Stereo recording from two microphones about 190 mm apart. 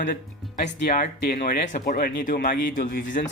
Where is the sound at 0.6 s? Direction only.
40° left (ahead or behind).